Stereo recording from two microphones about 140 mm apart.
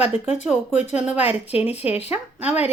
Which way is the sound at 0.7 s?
50° left (ahead or behind).